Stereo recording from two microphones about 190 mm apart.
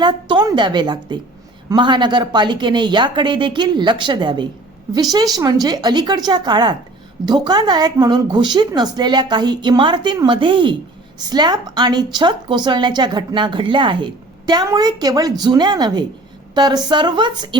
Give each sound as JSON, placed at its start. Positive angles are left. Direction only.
{"t": 0.0, "sound": "a woman's voice", "side_deg": -25}